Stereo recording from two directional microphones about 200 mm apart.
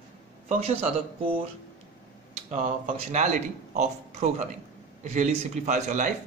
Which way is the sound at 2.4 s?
30° right (ahead or behind).